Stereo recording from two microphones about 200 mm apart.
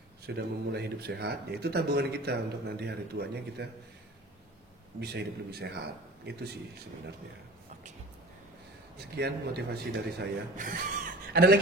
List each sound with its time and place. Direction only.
0.4 s speech: 55° right (ahead or behind)
5.1 s speech: 55° right (ahead or behind)
8.9 s speech: 55° right (ahead or behind)